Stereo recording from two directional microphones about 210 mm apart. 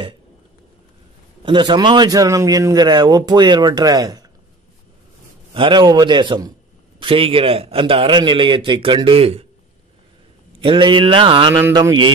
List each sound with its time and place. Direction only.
1.4 s a man's voice: 20° right (ahead or behind)
5.5 s a man's voice: 25° right (ahead or behind)
10.6 s a man's voice: 25° right (ahead or behind)